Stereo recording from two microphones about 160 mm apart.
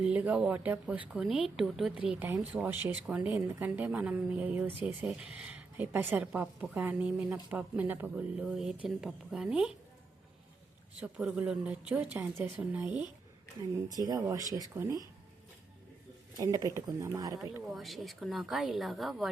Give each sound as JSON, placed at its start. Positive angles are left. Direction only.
{"t": 0.0, "sound": "a woman's voice", "side_deg": -10}
{"t": 11.0, "sound": "a woman's voice", "side_deg": -10}
{"t": 13.8, "sound": "a woman's voice", "side_deg": -25}
{"t": 16.4, "sound": "speech", "side_deg": -25}
{"t": 17.7, "sound": "speech", "side_deg": 0}